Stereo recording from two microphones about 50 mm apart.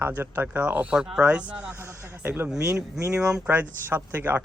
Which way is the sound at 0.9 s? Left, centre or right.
Centre.